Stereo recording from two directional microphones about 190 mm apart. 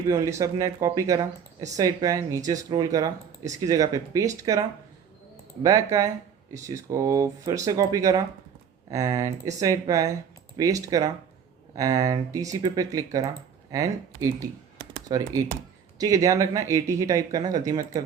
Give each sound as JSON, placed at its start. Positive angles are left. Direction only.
{"t": 0.1, "sound": "speech", "side_deg": -15}
{"t": 5.6, "sound": "speech", "side_deg": -15}